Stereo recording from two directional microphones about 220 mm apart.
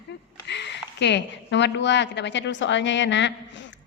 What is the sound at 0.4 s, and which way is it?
A woman's voice, 50° left (ahead or behind).